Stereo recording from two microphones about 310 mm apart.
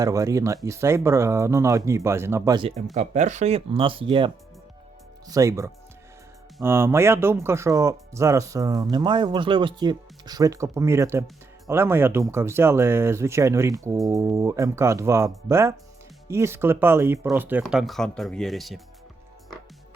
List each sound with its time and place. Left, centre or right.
0.0 s speech: centre
5.3 s speech: centre